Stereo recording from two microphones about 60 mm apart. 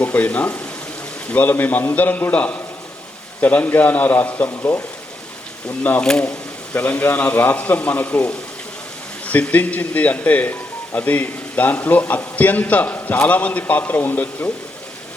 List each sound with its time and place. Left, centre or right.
0.0 s a man's voice: left
4.4 s speech: left
6.0 s speech: centre
6.7 s speech: left